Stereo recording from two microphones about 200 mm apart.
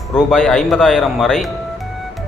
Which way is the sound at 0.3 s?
Centre (ahead or behind).